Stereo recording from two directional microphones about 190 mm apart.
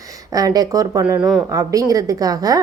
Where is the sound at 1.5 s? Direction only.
20° right (ahead or behind).